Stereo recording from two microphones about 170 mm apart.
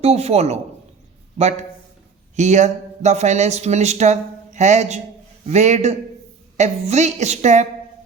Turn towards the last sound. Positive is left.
turn(degrees=-45)  # may be behind; listen again after turning